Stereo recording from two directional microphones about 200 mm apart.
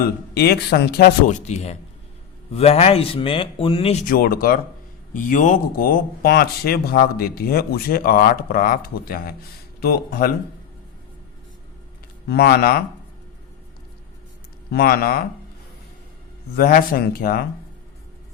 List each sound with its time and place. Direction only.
0.0 s speech: 50° left (ahead or behind)
1.3 s speech: 35° left (ahead or behind)
4.0 s speech: 45° left (ahead or behind)
12.3 s speech: 55° left (ahead or behind)
14.7 s speech: 50° left (ahead or behind)
16.6 s speech: 50° left (ahead or behind)